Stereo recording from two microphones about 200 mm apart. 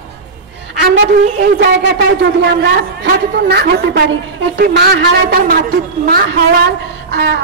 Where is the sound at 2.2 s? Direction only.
55° right (ahead or behind).